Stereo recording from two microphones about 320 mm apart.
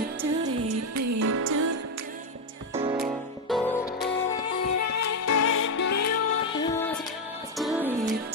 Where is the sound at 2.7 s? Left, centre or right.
Centre.